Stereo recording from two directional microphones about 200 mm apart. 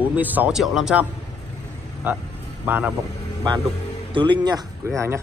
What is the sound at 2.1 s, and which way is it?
Speech, 10° right (ahead or behind).